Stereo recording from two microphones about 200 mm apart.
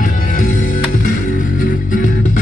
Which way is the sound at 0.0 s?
40° left (ahead or behind).